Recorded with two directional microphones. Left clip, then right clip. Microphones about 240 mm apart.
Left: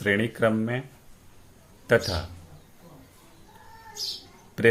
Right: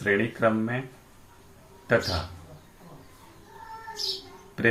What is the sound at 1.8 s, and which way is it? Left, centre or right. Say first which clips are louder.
Speech: left 2 dB; left.